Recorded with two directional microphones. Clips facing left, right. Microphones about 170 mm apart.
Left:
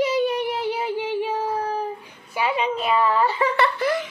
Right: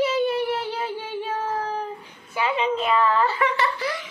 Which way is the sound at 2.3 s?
10° left (ahead or behind).